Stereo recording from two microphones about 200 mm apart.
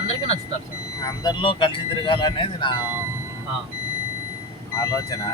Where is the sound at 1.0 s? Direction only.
20° left (ahead or behind).